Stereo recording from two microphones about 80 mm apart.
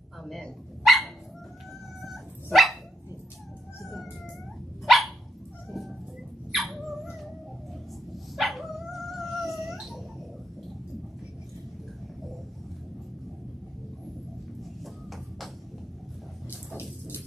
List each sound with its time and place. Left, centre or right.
0.2 s dog: centre
4.8 s dog: centre
6.5 s a sound: centre
8.4 s dog: centre
14.6 s a sound: centre
16.4 s dog: left